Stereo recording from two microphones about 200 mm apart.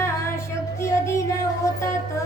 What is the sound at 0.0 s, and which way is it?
Female singing, 15° left (ahead or behind).